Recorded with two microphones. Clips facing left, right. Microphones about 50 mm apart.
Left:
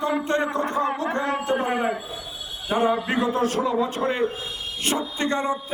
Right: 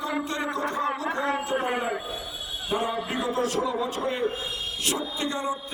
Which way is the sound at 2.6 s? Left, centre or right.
Left.